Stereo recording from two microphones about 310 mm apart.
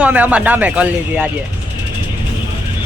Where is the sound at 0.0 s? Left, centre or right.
Centre.